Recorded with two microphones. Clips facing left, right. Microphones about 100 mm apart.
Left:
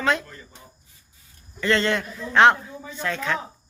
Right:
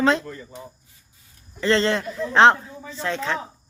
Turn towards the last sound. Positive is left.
turn(degrees=-30)  # may be behind; listen again after turning